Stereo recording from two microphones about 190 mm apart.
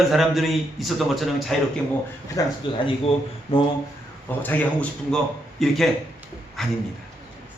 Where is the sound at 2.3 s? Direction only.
25° left (ahead or behind).